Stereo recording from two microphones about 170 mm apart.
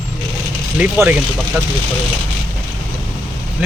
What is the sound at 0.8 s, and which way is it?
Speech, 10° right (ahead or behind).